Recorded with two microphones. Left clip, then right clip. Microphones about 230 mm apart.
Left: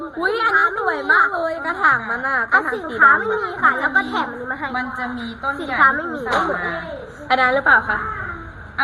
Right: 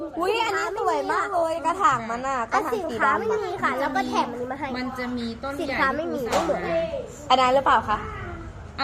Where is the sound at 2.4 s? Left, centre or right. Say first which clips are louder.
Left 7 dB; centre.